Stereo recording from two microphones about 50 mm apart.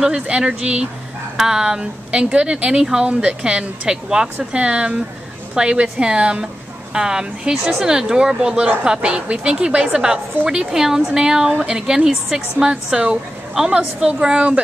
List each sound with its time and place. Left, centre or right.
0.0 s a woman's voice: centre